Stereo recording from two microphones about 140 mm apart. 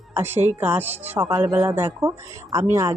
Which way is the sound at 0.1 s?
15° right (ahead or behind).